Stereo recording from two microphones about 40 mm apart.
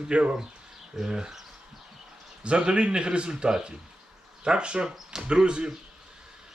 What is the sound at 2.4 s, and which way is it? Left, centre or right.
A man's voice, right.